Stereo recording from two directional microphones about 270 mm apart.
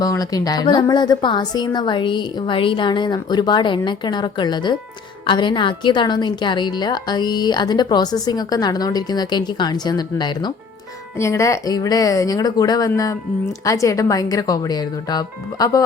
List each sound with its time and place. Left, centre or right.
0.0 s a woman's voice: centre